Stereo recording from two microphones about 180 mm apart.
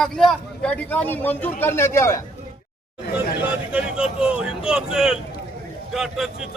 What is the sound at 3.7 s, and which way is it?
Speech, 5° right (ahead or behind).